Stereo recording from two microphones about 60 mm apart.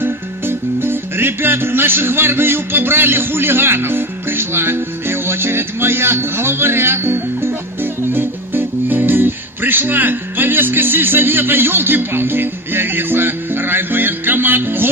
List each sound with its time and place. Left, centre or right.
0.0 s music: right